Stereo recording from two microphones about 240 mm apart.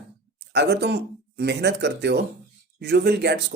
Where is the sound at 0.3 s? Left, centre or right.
Right.